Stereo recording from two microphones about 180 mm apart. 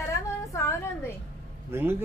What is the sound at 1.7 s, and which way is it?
Speech, 10° right (ahead or behind).